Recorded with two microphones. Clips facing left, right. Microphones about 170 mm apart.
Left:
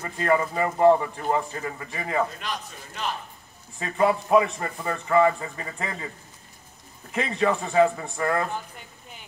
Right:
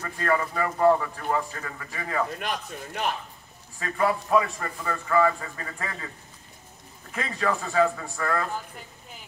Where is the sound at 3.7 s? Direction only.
20° left (ahead or behind).